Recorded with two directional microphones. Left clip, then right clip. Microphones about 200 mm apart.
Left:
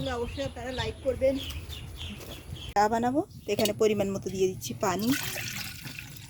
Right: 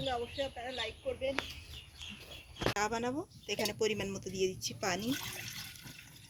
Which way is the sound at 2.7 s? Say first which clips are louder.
Left 12 dB; 45° left (ahead or behind).